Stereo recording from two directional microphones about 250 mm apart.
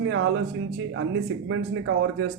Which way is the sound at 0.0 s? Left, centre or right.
Right.